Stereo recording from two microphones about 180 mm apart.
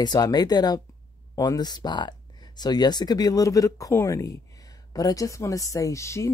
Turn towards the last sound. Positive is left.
turn(degrees=15)  # may be behind; listen again after turning